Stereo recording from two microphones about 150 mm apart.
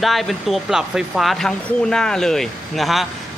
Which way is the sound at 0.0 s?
Centre (ahead or behind).